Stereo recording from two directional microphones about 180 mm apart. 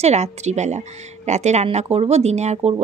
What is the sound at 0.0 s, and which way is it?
A woman's voice, 40° right (ahead or behind).